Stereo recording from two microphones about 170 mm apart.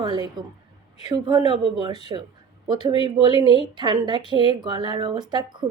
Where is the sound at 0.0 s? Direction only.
25° right (ahead or behind).